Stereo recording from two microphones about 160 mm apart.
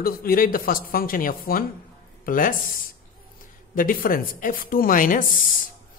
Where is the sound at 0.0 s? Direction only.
65° left (ahead or behind).